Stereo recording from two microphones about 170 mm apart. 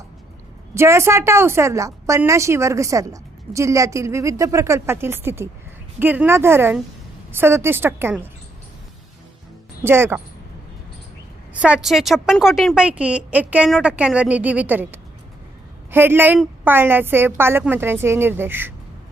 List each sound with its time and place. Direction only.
0.7 s a woman's voice: 15° right (ahead or behind)
9.8 s a woman's voice: 15° right (ahead or behind)
11.6 s a woman's voice: 5° right (ahead or behind)